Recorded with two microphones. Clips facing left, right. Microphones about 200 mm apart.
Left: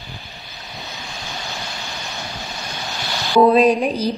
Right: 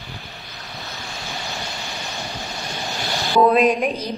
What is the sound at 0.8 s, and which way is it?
Waves, centre (ahead or behind).